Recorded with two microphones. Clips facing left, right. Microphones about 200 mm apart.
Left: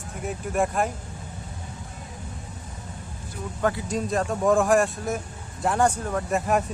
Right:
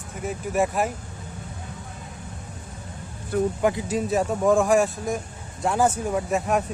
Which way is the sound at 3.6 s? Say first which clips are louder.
Right 3 dB; 15° right (ahead or behind).